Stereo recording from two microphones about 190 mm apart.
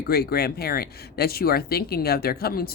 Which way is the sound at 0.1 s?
55° left (ahead or behind).